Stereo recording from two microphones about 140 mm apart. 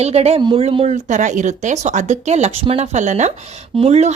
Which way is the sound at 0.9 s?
60° right (ahead or behind).